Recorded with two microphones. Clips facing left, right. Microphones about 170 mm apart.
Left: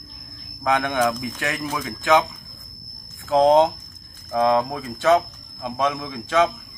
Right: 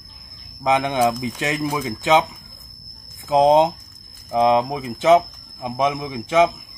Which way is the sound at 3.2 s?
20° right (ahead or behind).